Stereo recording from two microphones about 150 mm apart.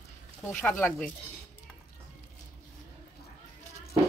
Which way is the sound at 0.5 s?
10° left (ahead or behind).